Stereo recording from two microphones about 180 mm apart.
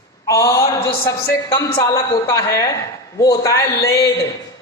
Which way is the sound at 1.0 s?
20° left (ahead or behind).